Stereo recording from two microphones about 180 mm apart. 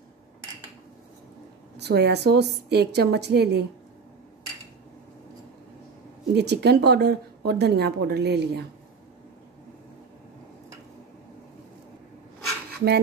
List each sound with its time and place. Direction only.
1.8 s a woman's voice: 65° right (ahead or behind)
6.3 s a woman's voice: 65° right (ahead or behind)